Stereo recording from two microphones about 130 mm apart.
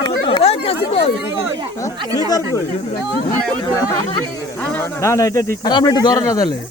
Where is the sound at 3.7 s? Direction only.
25° left (ahead or behind).